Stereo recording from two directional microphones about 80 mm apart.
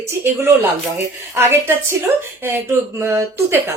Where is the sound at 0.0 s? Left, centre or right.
Right.